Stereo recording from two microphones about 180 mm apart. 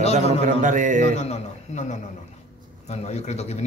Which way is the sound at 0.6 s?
45° right (ahead or behind).